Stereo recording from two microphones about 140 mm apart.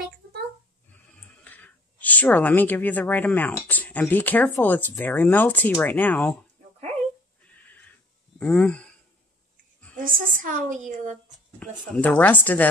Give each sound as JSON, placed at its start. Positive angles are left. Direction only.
{"t": 1.4, "sound": "speech", "side_deg": 10}
{"t": 7.5, "sound": "a sound", "side_deg": 10}
{"t": 8.4, "sound": "speech", "side_deg": 5}
{"t": 9.9, "sound": "a woman's voice", "side_deg": -75}
{"t": 11.9, "sound": "speech", "side_deg": 10}